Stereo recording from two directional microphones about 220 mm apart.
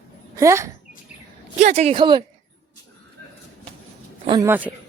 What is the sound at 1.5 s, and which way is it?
Speech, 30° right (ahead or behind).